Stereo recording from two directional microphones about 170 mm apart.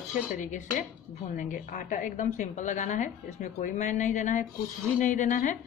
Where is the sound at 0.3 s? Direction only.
45° left (ahead or behind).